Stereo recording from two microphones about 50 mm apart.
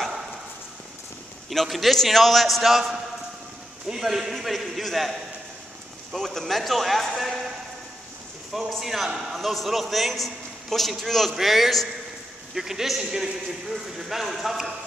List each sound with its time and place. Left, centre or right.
1.5 s a man's voice: centre
6.1 s a man's voice: centre
8.5 s a man's voice: centre